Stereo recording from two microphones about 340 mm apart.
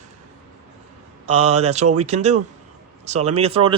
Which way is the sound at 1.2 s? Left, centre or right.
Centre.